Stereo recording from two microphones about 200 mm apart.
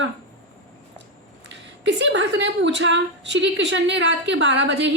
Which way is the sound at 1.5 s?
60° right (ahead or behind).